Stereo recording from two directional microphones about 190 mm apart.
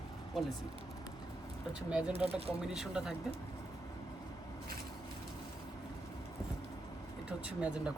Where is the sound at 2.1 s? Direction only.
30° right (ahead or behind).